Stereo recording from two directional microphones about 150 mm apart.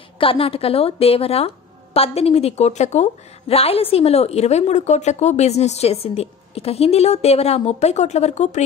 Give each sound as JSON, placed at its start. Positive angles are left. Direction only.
{"t": 0.2, "sound": "a woman's voice", "side_deg": 40}